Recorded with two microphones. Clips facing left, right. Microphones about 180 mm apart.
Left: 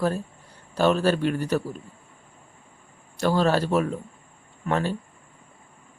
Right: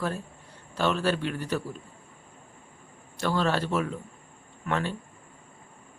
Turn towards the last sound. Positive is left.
turn(degrees=40)  # may be behind; listen again after turning